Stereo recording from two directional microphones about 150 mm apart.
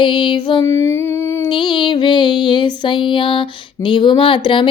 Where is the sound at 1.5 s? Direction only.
30° left (ahead or behind).